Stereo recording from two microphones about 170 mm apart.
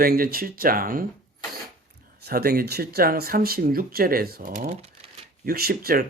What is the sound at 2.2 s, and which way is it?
Speech, 65° right (ahead or behind).